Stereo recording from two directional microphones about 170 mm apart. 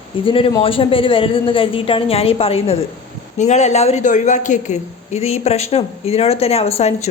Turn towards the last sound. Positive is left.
turn(degrees=40)  # may be behind; listen again after turning